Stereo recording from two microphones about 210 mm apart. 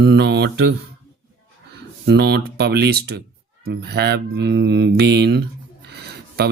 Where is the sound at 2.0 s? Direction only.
50° right (ahead or behind).